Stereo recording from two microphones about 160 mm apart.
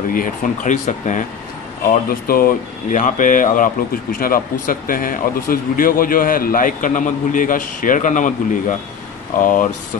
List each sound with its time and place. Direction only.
0.1 s speech: 55° left (ahead or behind)
1.9 s speech: 65° left (ahead or behind)